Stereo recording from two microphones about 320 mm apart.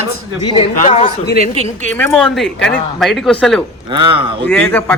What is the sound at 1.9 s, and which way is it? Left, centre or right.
Speech, centre.